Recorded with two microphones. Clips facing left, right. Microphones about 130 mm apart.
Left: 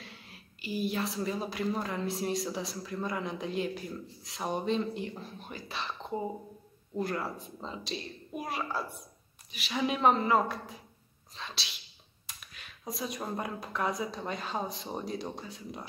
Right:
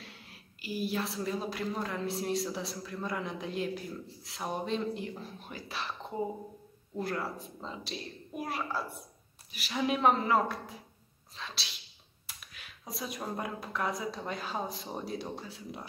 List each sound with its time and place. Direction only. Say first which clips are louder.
0.6 s a woman's voice: left 1 dB; 5° right (ahead or behind)
7.0 s a woman's voice: left 1 dB; centre (ahead or behind)